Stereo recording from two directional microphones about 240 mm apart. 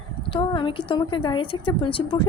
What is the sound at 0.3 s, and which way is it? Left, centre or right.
A woman's voice, left.